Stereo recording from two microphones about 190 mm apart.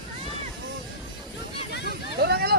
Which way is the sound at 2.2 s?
60° right (ahead or behind).